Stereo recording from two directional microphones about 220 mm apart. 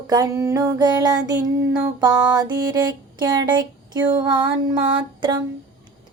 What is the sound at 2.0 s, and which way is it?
Female singing, 20° right (ahead or behind).